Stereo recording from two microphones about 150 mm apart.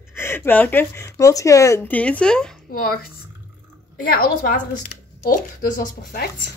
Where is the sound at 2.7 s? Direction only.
85° left.